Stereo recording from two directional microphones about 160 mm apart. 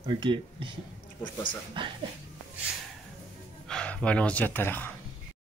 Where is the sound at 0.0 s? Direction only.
30° right (ahead or behind).